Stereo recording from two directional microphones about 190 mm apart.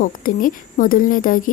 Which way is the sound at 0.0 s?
45° left (ahead or behind).